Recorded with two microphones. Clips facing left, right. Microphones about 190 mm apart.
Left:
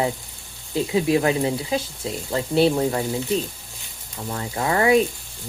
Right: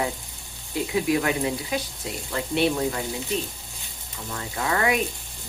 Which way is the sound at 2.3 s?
30° left (ahead or behind).